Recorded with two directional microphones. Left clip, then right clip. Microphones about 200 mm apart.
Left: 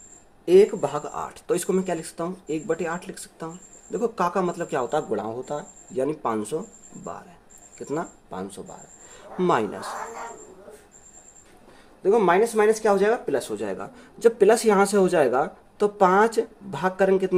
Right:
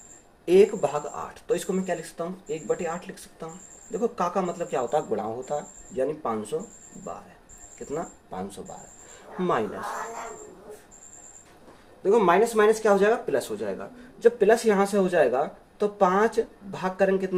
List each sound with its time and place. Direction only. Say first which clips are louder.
0.4 s speech: left 2 dB; 30° left (ahead or behind)
6.1 s speech: left 3 dB; 55° left (ahead or behind)
7.9 s speech: left 3 dB; 45° left (ahead or behind)
9.1 s a sound: left 4 dB; 45° left (ahead or behind)
12.0 s speech: left 1 dB; 20° left (ahead or behind); by 17.3 s 55° left (ahead or behind)